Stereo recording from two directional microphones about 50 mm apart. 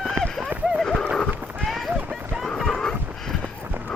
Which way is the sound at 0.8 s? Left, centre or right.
Centre.